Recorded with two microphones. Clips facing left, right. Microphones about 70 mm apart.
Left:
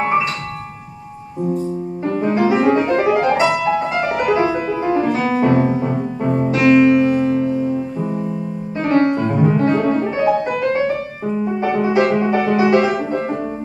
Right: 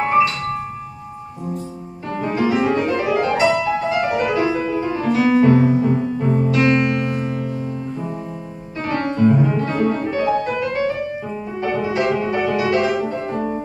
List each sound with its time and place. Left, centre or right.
2.1 s music: centre
6.6 s music: centre
8.8 s piano: left
9.4 s music: left
10.6 s music: left
11.6 s music: left
12.0 s music: left
12.4 s music: left